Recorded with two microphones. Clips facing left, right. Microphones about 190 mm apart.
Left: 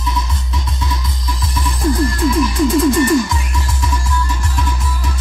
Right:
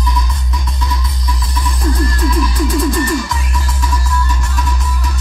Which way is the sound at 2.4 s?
25° left (ahead or behind).